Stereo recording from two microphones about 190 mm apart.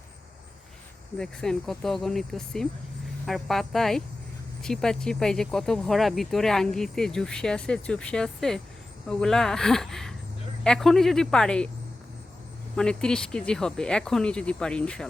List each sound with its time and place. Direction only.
1.2 s speech: 5° left (ahead or behind)
12.7 s speech: 5° left (ahead or behind)